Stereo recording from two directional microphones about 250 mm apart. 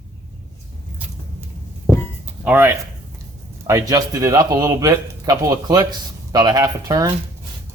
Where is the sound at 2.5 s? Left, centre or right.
Centre.